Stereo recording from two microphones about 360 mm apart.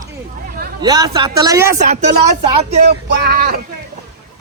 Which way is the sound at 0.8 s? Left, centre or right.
Centre.